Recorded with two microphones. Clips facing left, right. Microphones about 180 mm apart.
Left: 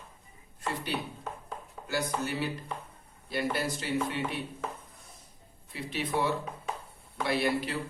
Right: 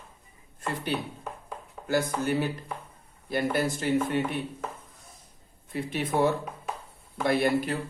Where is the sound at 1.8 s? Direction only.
50° right (ahead or behind).